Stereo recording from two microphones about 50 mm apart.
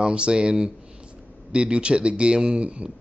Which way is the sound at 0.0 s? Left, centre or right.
Centre.